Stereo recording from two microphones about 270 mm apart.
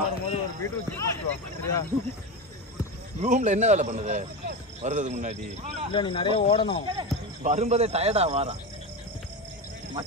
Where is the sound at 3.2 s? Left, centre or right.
Right.